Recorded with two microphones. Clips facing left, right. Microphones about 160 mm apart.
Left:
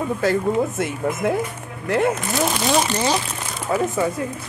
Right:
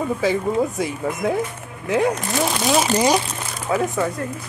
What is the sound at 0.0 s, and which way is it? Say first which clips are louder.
Speech: even; centre (ahead or behind).